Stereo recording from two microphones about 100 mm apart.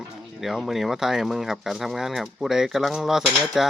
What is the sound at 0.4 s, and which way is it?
Speech, centre (ahead or behind).